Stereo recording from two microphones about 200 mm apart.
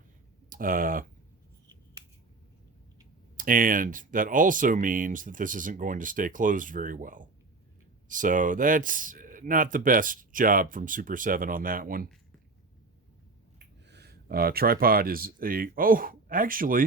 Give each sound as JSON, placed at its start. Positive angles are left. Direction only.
{"t": 0.5, "sound": "speech", "side_deg": -45}
{"t": 3.3, "sound": "speech", "side_deg": -45}
{"t": 13.8, "sound": "speech", "side_deg": -55}